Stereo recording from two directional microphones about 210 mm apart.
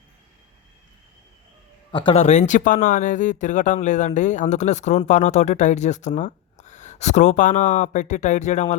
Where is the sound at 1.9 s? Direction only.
25° left (ahead or behind).